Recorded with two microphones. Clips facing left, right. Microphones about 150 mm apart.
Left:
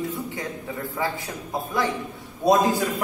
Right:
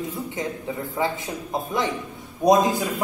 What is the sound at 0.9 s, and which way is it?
Speech, 20° right (ahead or behind).